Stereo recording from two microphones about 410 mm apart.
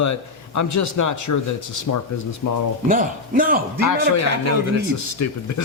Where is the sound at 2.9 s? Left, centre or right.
Centre.